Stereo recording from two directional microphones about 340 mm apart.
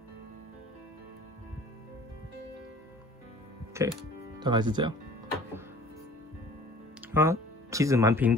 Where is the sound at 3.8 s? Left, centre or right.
Centre.